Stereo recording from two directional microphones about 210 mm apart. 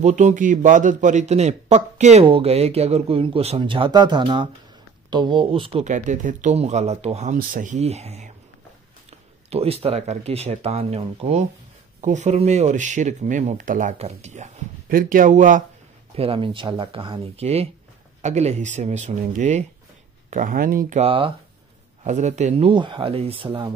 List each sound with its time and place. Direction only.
0.0 s a man's voice: 35° right (ahead or behind)
9.5 s a man's voice: 30° right (ahead or behind)
16.2 s a man's voice: 25° right (ahead or behind)